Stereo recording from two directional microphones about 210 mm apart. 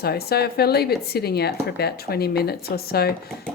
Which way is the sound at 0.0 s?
50° left (ahead or behind).